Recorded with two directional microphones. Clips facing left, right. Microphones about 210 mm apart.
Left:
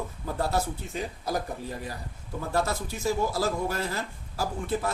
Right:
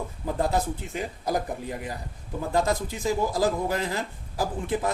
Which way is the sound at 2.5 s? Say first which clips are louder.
Right 3 dB; 15° right (ahead or behind).